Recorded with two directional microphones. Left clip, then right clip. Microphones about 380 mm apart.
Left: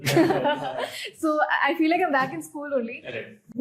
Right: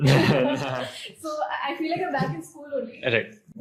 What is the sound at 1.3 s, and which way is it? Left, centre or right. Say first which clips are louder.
Speech: left 5 dB; left.